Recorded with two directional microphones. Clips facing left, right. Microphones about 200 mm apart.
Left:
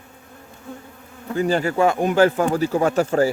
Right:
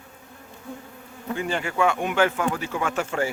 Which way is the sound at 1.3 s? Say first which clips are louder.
Left 7 dB; 40° left (ahead or behind).